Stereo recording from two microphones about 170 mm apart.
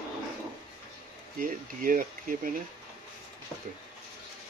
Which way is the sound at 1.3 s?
55° right (ahead or behind).